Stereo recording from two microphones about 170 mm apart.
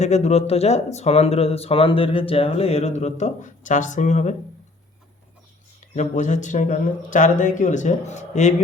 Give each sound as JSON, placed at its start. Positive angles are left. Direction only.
{"t": 0.0, "sound": "speech", "side_deg": 40}
{"t": 5.9, "sound": "speech", "side_deg": 45}